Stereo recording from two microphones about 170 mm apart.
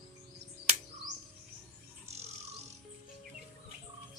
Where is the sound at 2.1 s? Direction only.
40° right (ahead or behind).